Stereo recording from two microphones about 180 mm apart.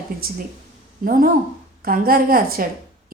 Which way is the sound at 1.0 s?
50° right (ahead or behind).